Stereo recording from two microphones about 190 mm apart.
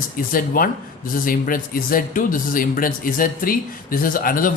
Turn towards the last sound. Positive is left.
turn(degrees=50)  # may be behind; listen again after turning